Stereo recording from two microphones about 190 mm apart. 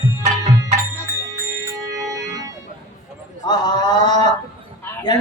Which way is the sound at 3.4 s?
20° left (ahead or behind).